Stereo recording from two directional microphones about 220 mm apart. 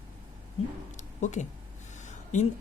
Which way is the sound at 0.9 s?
35° left (ahead or behind).